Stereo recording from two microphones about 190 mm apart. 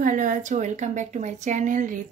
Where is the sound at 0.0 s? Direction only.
40° right (ahead or behind).